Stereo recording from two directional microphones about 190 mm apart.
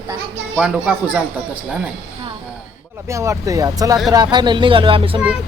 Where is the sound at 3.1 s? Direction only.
15° right (ahead or behind).